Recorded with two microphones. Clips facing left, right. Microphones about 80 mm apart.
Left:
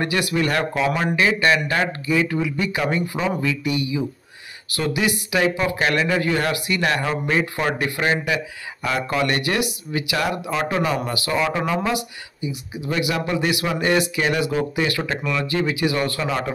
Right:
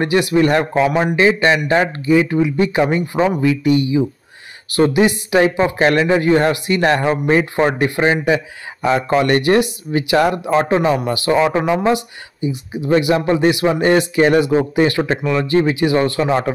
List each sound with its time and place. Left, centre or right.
0.0 s speech: right